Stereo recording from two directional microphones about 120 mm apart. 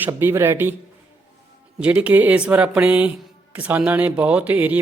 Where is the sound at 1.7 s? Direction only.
10° right (ahead or behind).